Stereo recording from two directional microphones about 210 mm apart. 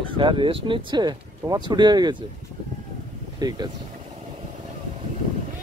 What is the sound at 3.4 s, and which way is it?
Speech, 20° right (ahead or behind).